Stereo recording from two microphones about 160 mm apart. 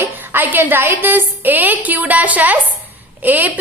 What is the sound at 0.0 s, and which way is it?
A woman's voice, 15° right (ahead or behind).